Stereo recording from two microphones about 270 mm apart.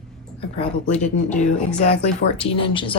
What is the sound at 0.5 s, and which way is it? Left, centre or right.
Speech, left.